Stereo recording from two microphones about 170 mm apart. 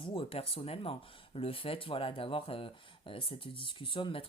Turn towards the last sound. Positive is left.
turn(degrees=30)  # may be behind; listen again after turning